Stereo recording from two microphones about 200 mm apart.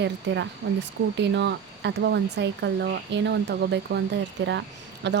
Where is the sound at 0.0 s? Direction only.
60° right (ahead or behind).